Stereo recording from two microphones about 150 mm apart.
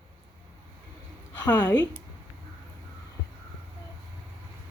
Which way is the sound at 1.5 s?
15° left (ahead or behind).